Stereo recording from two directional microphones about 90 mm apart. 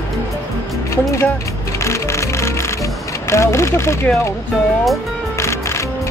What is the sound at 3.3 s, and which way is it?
Speech, 30° left (ahead or behind).